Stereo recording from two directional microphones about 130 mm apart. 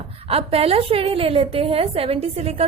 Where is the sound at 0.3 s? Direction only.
50° right (ahead or behind).